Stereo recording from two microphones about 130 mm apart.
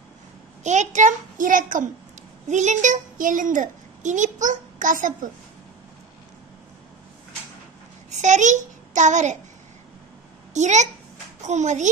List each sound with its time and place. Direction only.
0.7 s a child's voice: 65° right (ahead or behind); by 1.9 s 90° right
2.4 s a child's voice: 65° right (ahead or behind); by 5.3 s 90° right
8.1 s a child's voice: 70° right (ahead or behind)
10.5 s a child's voice: 65° right (ahead or behind)